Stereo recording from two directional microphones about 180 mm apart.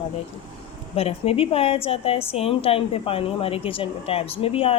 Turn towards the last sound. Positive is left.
turn(degrees=30)  # may be behind; listen again after turning